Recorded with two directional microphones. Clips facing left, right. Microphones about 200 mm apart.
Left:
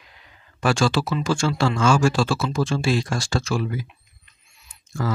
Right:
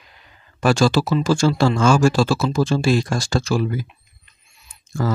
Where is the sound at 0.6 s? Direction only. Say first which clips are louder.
Right 4 dB; 40° right (ahead or behind).